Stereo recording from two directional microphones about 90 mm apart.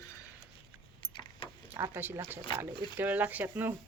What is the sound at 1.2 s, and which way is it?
Keys jangling, 65° left (ahead or behind).